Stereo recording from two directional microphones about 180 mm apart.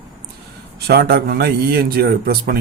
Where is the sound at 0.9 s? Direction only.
60° right (ahead or behind).